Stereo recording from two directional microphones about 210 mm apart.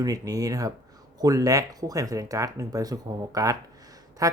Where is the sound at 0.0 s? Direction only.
15° right (ahead or behind).